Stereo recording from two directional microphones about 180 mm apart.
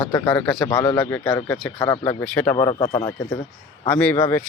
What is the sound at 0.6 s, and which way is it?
A man's voice, 20° left (ahead or behind).